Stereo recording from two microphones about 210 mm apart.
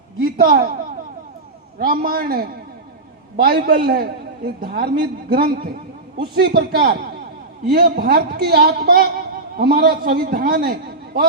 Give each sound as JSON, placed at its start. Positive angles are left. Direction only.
{"t": 0.3, "sound": "a man's voice", "side_deg": -45}
{"t": 1.8, "sound": "a man's voice", "side_deg": -45}